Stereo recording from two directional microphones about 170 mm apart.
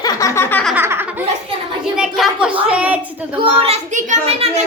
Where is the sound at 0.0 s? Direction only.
20° left (ahead or behind).